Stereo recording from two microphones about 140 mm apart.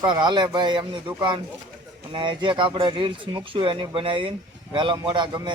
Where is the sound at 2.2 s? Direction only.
35° right (ahead or behind).